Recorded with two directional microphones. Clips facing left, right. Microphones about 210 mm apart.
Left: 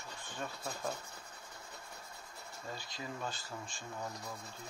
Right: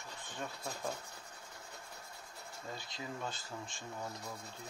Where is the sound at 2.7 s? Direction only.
20° right (ahead or behind).